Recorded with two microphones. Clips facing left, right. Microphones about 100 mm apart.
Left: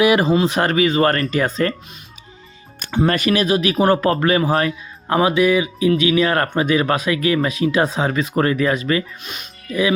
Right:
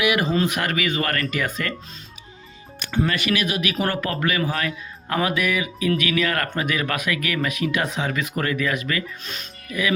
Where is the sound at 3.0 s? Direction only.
40° left (ahead or behind).